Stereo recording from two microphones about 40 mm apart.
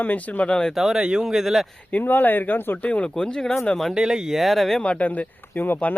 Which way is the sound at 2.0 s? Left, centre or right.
Left.